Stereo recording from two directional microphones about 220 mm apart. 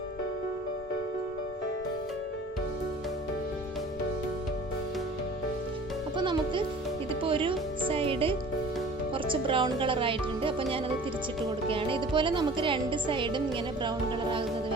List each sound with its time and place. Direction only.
6.1 s a child's voice: 20° right (ahead or behind)